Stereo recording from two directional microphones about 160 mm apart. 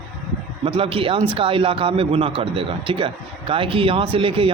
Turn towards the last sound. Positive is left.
turn(degrees=-35)  # may be behind; listen again after turning